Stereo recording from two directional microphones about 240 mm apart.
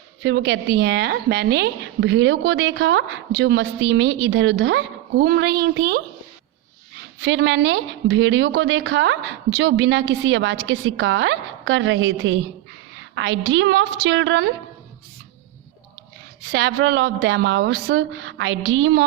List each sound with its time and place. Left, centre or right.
0.2 s a woman's voice: right
7.3 s a woman's voice: right
16.5 s a woman's voice: right